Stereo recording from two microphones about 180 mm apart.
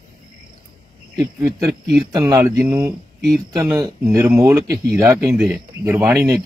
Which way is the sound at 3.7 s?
20° right (ahead or behind).